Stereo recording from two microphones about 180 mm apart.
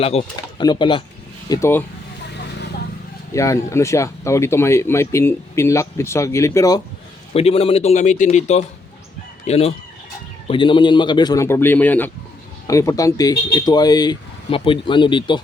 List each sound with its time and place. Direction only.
0.0 s a man's voice: 35° left (ahead or behind)
1.5 s speech: 15° left (ahead or behind)
3.3 s speech: 15° left (ahead or behind)
7.3 s a man's voice: 35° left (ahead or behind)
9.4 s fowl: 35° left (ahead or behind)
10.5 s speech: 25° left (ahead or behind)